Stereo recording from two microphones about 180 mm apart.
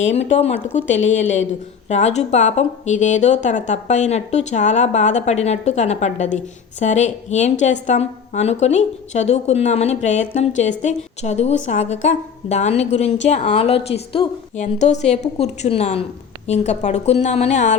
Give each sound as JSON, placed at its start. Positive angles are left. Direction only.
{"t": 0.1, "sound": "a woman's voice", "side_deg": 35}
{"t": 0.9, "sound": "speech", "side_deg": 90}
{"t": 1.9, "sound": "a woman's voice", "side_deg": 40}